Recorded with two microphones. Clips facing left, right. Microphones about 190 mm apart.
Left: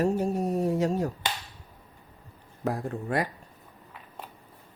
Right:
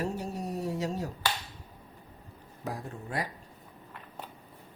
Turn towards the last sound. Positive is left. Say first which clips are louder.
# left 7 dB
turn(degrees=60)  # may be behind; listen again after turning